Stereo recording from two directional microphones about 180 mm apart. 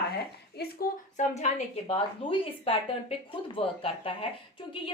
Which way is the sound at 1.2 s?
45° left (ahead or behind).